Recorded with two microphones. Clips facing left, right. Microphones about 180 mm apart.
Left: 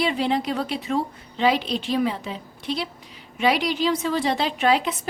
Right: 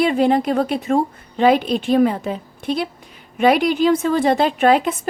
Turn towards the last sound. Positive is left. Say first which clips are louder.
# right 6 dB
turn(degrees=-50)  # may be behind; listen again after turning